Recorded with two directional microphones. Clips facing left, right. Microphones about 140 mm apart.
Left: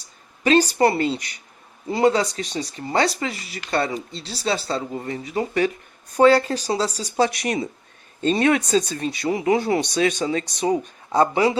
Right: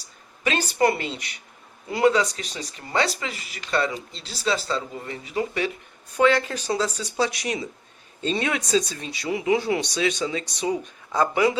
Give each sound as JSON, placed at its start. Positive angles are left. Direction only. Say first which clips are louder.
{"t": 0.4, "sound": "speech", "louder": "left 5 dB", "side_deg": 35}
{"t": 7.2, "sound": "speech", "louder": "left 5 dB", "side_deg": 55}
{"t": 11.1, "sound": "speech", "louder": "left 3 dB", "side_deg": 30}